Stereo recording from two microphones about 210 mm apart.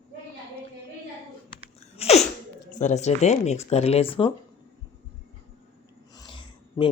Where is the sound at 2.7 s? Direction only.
35° left (ahead or behind).